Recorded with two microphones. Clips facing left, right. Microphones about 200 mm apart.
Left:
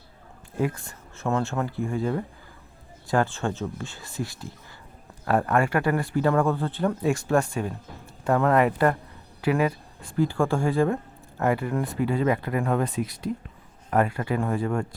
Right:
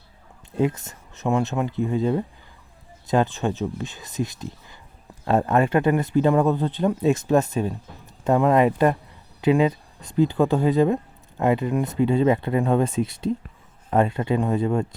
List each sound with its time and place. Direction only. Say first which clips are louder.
0.5 s speech: right 4 dB; 20° right (ahead or behind)